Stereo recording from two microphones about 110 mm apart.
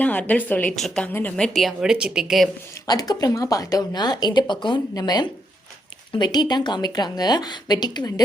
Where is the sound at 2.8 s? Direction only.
35° left (ahead or behind).